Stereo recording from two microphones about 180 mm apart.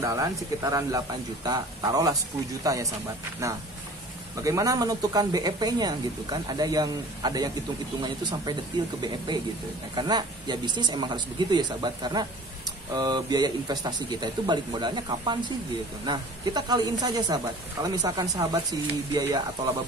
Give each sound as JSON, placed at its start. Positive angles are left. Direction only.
{"t": 0.0, "sound": "speech", "side_deg": -20}
{"t": 4.4, "sound": "speech", "side_deg": -20}